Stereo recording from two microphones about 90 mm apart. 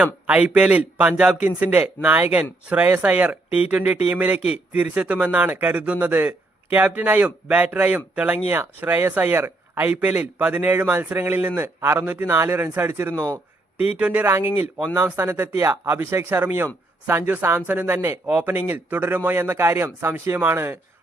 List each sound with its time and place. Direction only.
0.0 s a man's voice: 15° right (ahead or behind); by 13.4 s 30° right (ahead or behind)
13.7 s a man's voice: 15° right (ahead or behind)